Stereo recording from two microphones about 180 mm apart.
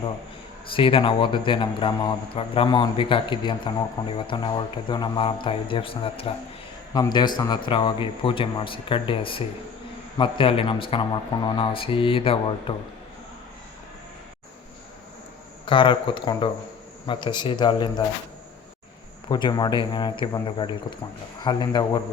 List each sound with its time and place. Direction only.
0.7 s speech: 30° left (ahead or behind)
15.6 s speech: 25° left (ahead or behind)
19.3 s speech: 25° left (ahead or behind)